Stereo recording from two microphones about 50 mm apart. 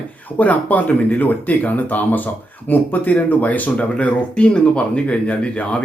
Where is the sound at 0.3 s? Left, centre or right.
Left.